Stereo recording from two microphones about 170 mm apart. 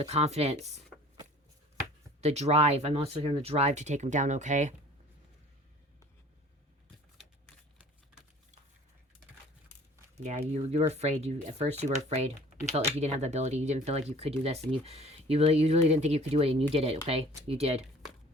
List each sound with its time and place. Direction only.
0.0 s speech: 40° right (ahead or behind)
2.2 s speech: 40° right (ahead or behind)
10.2 s speech: 40° right (ahead or behind)